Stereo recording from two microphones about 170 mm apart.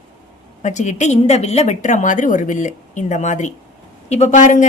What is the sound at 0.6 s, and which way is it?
A woman's voice, 45° left (ahead or behind).